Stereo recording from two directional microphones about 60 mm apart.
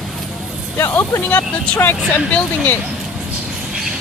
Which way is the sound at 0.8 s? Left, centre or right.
Left.